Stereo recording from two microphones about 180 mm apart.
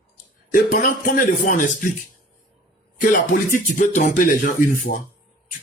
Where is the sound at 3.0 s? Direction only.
50° left (ahead or behind).